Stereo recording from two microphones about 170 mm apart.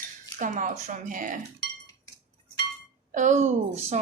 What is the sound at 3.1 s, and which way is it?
Speech, 45° right (ahead or behind).